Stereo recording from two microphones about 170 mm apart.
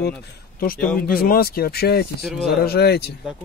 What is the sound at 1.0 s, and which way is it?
Speech, 60° left (ahead or behind).